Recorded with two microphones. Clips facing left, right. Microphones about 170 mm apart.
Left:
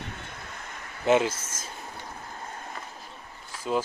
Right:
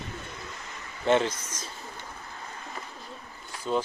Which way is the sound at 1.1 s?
5° left (ahead or behind).